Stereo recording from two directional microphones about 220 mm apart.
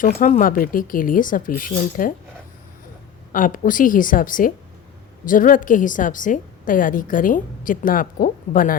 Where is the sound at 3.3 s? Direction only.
40° left (ahead or behind).